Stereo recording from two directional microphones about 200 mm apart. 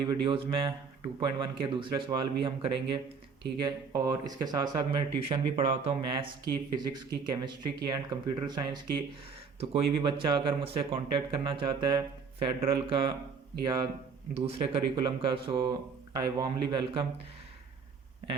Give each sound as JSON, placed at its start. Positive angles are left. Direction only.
{"t": 0.0, "sound": "speech", "side_deg": -25}